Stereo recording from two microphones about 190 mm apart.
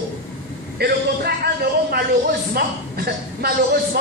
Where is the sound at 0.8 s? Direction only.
55° right (ahead or behind).